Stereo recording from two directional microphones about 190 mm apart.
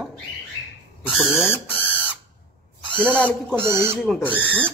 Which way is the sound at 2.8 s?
5° left (ahead or behind).